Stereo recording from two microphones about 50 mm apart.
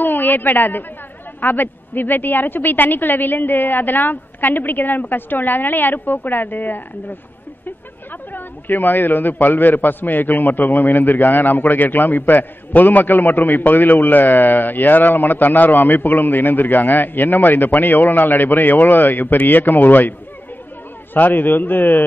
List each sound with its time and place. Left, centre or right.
0.0 s a woman's voice: left
8.3 s a man's voice: left